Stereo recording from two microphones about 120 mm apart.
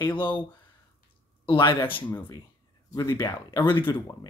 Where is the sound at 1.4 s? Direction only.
45° left (ahead or behind).